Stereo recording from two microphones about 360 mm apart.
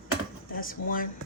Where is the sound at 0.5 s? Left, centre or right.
Left.